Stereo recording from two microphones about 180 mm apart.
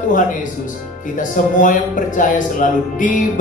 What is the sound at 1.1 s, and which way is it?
Speech, 45° left (ahead or behind).